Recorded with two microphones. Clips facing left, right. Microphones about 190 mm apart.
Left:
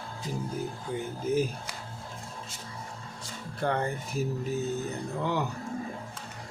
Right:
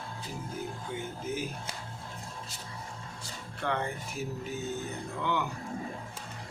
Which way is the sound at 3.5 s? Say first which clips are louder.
Left 4 dB; 40° left (ahead or behind).